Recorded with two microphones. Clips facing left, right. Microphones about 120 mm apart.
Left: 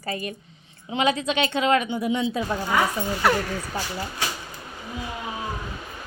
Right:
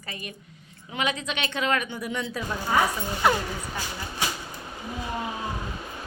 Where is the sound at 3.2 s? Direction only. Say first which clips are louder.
Left 1 dB; 15° right (ahead or behind).